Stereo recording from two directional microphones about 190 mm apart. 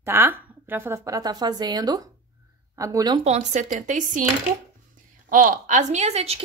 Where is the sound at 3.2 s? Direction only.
35° right (ahead or behind).